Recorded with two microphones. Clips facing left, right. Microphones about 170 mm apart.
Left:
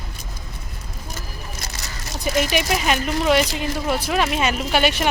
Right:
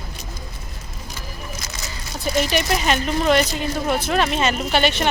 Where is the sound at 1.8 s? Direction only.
70° left (ahead or behind).